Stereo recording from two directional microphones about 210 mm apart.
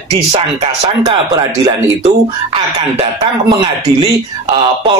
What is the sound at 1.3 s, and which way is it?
Speech, 15° right (ahead or behind).